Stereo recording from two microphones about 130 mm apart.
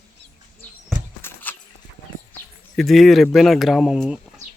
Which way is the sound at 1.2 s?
20° left (ahead or behind).